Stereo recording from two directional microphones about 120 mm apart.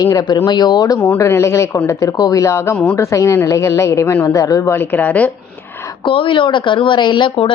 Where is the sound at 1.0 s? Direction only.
20° left (ahead or behind).